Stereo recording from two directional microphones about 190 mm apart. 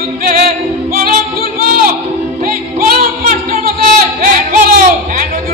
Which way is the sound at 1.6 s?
50° right (ahead or behind).